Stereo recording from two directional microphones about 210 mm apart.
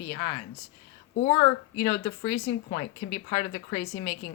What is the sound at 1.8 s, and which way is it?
Speech, 25° left (ahead or behind).